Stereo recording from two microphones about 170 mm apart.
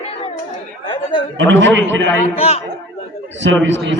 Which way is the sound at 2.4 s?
35° left (ahead or behind).